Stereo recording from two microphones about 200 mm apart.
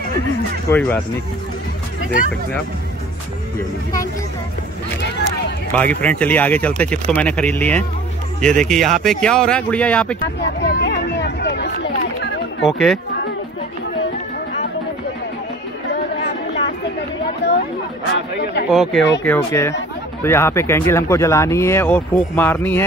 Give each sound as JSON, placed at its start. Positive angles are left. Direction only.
{"t": 0.7, "sound": "speech", "side_deg": 10}
{"t": 5.0, "sound": "run", "side_deg": 60}
{"t": 5.7, "sound": "speech", "side_deg": 10}
{"t": 10.4, "sound": "a sound", "side_deg": 60}
{"t": 12.6, "sound": "speech", "side_deg": 0}
{"t": 17.4, "sound": "speech", "side_deg": 60}
{"t": 18.7, "sound": "speech", "side_deg": 0}
{"t": 19.2, "sound": "speech", "side_deg": 10}